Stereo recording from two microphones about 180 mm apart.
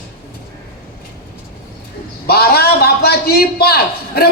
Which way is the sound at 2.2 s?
60° left (ahead or behind).